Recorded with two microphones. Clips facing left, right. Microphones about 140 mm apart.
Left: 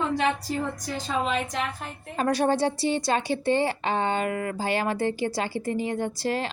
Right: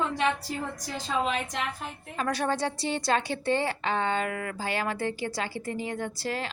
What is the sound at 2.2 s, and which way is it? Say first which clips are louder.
A woman's voice: left 5 dB; 25° left (ahead or behind).